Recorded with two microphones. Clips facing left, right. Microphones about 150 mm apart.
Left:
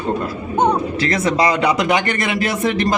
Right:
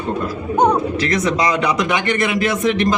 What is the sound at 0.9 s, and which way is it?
Speech, 30° left (ahead or behind).